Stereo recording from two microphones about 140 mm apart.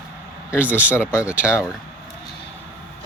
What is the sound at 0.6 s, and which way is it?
Speech, 10° right (ahead or behind).